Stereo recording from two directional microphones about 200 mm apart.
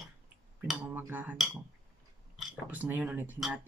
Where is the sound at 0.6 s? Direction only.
10° right (ahead or behind).